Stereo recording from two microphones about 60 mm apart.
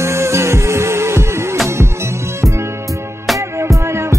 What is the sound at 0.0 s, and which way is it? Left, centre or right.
Music, right.